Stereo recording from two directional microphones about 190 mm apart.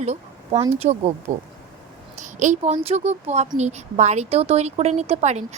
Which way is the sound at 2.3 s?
40° right (ahead or behind).